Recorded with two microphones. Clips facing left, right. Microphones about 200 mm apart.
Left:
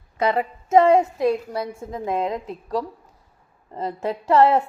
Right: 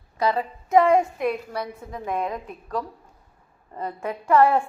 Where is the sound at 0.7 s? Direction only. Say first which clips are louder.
Left 2 dB; 25° left (ahead or behind).